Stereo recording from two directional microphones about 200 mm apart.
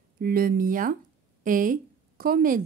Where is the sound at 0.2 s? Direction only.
50° right (ahead or behind).